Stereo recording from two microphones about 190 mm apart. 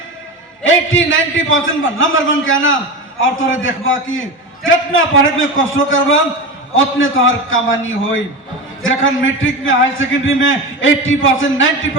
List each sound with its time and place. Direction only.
0.6 s a man's voice: 90° left